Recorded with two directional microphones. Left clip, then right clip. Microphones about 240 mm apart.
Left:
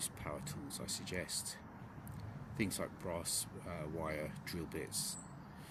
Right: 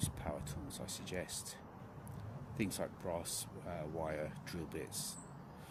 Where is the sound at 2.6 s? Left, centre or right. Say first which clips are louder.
Even; centre.